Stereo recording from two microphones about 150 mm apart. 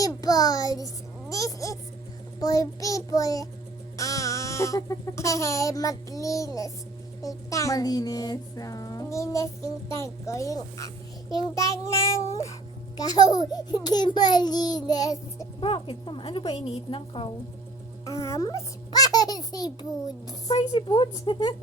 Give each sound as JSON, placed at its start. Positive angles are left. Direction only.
{"t": 0.0, "sound": "a sound", "side_deg": 25}
{"t": 1.3, "sound": "speech", "side_deg": 20}
{"t": 15.6, "sound": "a woman's voice", "side_deg": 35}
{"t": 18.0, "sound": "a child's voice", "side_deg": 20}